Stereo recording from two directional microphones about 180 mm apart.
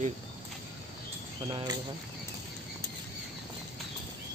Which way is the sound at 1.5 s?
25° right (ahead or behind).